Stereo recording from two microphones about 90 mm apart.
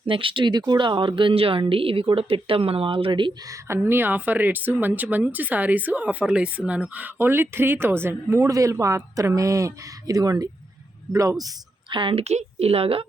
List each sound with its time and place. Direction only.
0.0 s speech: 75° right (ahead or behind)
3.8 s speech: 20° right (ahead or behind); by 11.5 s 40° right (ahead or behind)
11.9 s a woman's voice: 70° right (ahead or behind)
12.7 s speech: 90° right